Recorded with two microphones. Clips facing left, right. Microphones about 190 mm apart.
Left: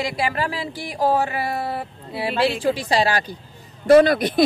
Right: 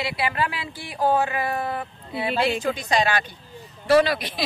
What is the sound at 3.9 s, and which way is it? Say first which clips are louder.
Speech: left 6 dB; 45° left (ahead or behind).